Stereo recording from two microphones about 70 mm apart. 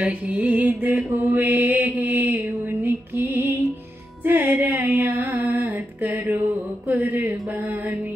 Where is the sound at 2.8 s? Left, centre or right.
Right.